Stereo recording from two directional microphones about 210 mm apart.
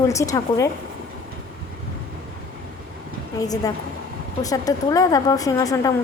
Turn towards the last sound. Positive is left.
turn(degrees=15)  # may be behind; listen again after turning